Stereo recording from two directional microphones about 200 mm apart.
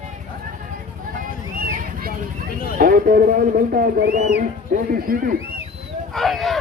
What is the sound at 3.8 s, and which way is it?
Speech, 45° right (ahead or behind).